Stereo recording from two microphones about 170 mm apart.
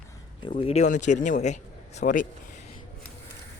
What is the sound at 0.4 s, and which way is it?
Speech, 30° left (ahead or behind).